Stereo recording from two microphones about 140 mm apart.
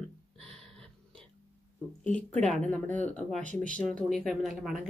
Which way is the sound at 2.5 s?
5° left (ahead or behind).